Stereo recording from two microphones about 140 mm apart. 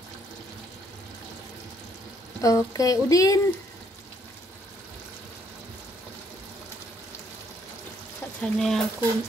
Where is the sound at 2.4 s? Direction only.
25° left (ahead or behind).